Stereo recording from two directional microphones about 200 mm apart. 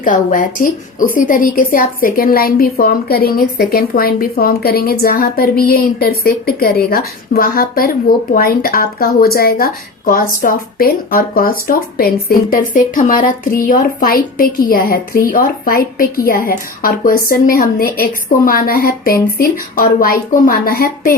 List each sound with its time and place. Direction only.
0.0 s speech: 40° left (ahead or behind)